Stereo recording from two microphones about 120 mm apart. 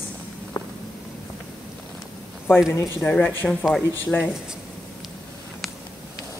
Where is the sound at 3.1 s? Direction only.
10° left (ahead or behind).